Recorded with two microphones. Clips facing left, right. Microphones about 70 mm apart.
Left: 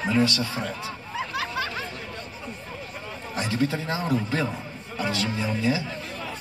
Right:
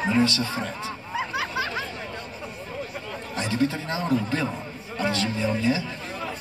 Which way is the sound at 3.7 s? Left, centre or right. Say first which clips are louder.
Right 1 dB; centre.